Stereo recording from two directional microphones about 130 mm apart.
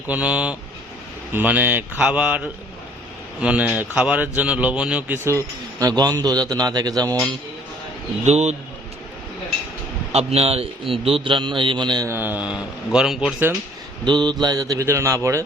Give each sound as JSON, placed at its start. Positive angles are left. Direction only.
{"t": 0.1, "sound": "speech", "side_deg": -5}
{"t": 5.8, "sound": "a man's voice", "side_deg": -30}
{"t": 8.3, "sound": "a man's voice", "side_deg": -60}
{"t": 10.1, "sound": "a man's voice", "side_deg": -55}
{"t": 12.0, "sound": "a man's voice", "side_deg": -15}
{"t": 14.0, "sound": "speech", "side_deg": -35}